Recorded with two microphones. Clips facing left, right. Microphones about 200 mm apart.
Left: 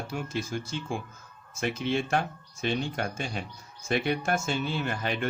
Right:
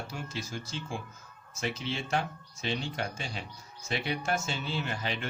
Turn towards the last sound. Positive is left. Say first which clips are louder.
# left 4 dB
turn(degrees=50)  # may be behind; listen again after turning